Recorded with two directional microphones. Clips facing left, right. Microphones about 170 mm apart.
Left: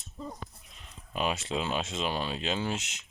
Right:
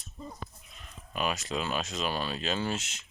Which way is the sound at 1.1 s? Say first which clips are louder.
Left 1 dB; 25° left (ahead or behind).